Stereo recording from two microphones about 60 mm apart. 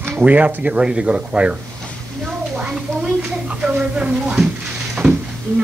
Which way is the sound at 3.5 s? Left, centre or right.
Centre.